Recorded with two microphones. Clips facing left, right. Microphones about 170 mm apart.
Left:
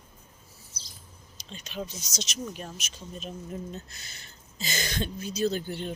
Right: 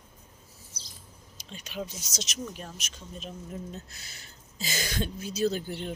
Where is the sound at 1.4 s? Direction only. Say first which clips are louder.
Even; 10° right (ahead or behind).